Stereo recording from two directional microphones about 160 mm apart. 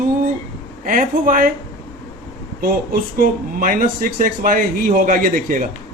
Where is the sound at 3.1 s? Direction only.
65° right (ahead or behind).